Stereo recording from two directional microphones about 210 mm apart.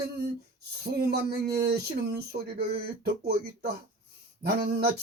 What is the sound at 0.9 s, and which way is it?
Speech, 50° right (ahead or behind).